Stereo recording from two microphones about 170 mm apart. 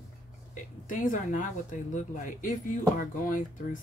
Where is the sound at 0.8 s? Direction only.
50° left (ahead or behind).